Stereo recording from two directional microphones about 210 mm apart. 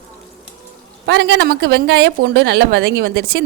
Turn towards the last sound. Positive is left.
turn(degrees=-50)  # may be behind; listen again after turning